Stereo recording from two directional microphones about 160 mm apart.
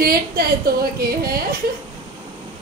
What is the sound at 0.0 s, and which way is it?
A woman's voice, 70° right (ahead or behind).